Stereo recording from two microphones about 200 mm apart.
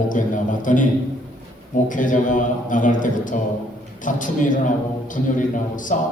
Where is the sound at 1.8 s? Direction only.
40° left (ahead or behind).